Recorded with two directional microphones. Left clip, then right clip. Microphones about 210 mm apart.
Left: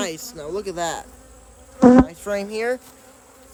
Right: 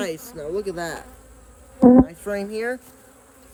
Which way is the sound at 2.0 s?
20° left (ahead or behind).